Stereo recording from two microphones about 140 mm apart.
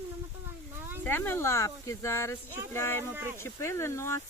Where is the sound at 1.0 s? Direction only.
15° left (ahead or behind).